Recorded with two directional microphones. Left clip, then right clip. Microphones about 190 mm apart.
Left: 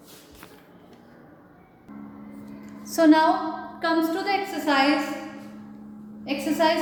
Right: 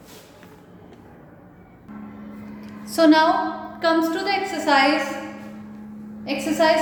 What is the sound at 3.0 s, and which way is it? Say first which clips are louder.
A woman's voice: right 2 dB; 5° left (ahead or behind).